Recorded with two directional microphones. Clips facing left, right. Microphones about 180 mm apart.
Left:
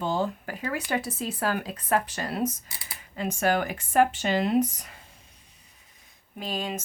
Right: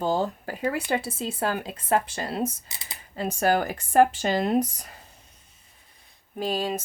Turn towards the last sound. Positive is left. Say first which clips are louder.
# right 5 dB
turn(degrees=-40)  # may be behind; listen again after turning